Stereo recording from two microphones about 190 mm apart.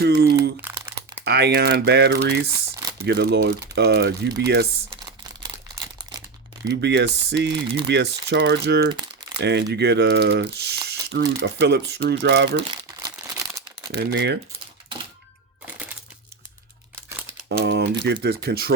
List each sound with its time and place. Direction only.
0.0 s crumpling: 55° right (ahead or behind)
0.6 s crumpling: 10° right (ahead or behind)
1.2 s speech: 60° right (ahead or behind)
6.7 s speech: 60° right (ahead or behind)
8.9 s crumpling: 25° right (ahead or behind)
9.4 s speech: 60° right (ahead or behind)
12.5 s crumpling: 25° right (ahead or behind)
13.9 s speech: 65° right (ahead or behind)
17.6 s speech: 65° right (ahead or behind)